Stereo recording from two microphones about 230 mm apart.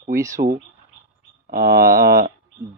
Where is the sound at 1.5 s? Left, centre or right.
Right.